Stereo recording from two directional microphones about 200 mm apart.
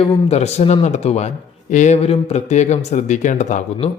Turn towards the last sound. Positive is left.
turn(degrees=35)  # may be behind; listen again after turning